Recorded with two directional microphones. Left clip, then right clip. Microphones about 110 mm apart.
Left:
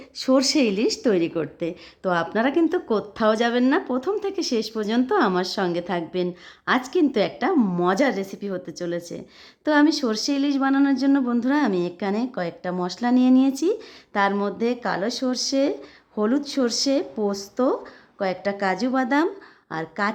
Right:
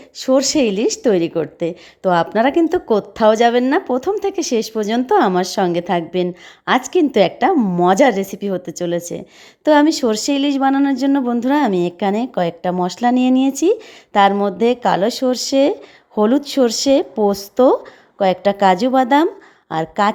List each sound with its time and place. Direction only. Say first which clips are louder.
0.2 s a woman's voice: right 5 dB; 20° right (ahead or behind); by 7.5 s 35° right (ahead or behind)
7.5 s a woman's voice: right 6 dB; 15° right (ahead or behind)
7.9 s speech: right 12 dB; 35° right (ahead or behind)